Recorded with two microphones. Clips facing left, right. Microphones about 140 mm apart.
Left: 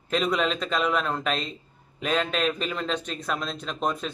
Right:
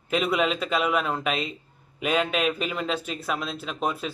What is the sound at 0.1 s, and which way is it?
A man's voice, 5° right (ahead or behind).